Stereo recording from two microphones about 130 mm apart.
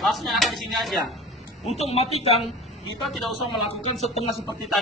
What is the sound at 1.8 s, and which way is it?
Speech, 55° left (ahead or behind).